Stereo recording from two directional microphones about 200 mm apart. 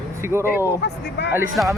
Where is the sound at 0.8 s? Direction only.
55° left (ahead or behind).